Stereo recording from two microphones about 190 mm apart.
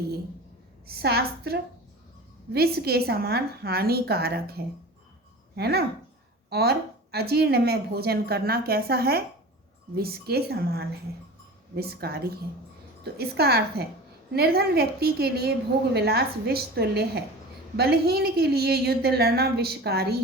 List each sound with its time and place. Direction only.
0.9 s a woman's voice: 55° right (ahead or behind)